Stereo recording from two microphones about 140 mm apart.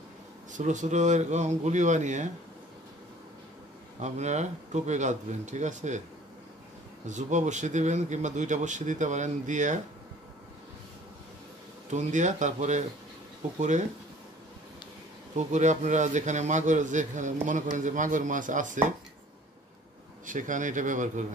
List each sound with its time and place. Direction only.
0.5 s a man's voice: 65° right (ahead or behind)
4.0 s a man's voice: 55° right (ahead or behind)
7.1 s a man's voice: 60° right (ahead or behind)
11.9 s a man's voice: 60° right (ahead or behind)
15.3 s a man's voice: 60° right (ahead or behind)
20.2 s a man's voice: 65° right (ahead or behind)